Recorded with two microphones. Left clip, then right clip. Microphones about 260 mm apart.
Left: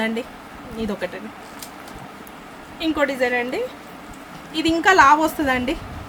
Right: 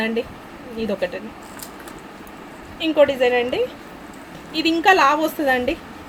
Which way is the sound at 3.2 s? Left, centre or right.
Left.